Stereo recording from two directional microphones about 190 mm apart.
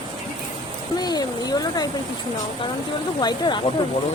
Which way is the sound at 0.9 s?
20° left (ahead or behind).